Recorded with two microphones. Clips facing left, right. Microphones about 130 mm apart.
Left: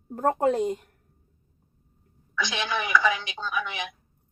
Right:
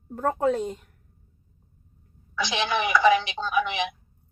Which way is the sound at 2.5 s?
20° right (ahead or behind).